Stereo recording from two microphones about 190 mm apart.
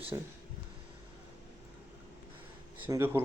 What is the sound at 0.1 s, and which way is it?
Speech, 20° right (ahead or behind).